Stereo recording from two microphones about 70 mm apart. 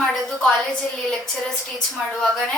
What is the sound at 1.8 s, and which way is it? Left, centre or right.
Speech, centre.